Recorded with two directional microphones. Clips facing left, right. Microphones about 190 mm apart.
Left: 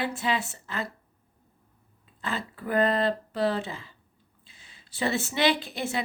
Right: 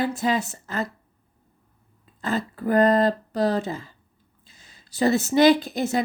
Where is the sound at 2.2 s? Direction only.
40° right (ahead or behind).